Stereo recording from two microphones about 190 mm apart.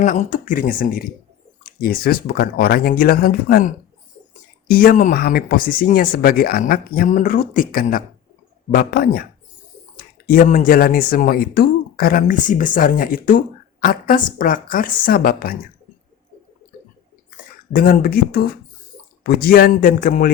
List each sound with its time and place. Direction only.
0.0 s speech: 45° left (ahead or behind)
4.7 s speech: 50° left (ahead or behind)
10.2 s speech: 45° left (ahead or behind)
17.7 s speech: 50° left (ahead or behind)